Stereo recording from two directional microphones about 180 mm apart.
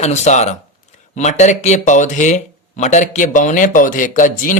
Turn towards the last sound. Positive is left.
turn(degrees=45)  # may be behind; listen again after turning